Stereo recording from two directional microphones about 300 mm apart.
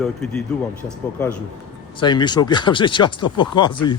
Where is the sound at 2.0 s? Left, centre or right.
Centre.